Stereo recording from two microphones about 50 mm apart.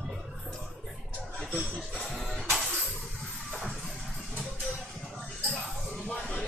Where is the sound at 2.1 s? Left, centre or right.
Centre.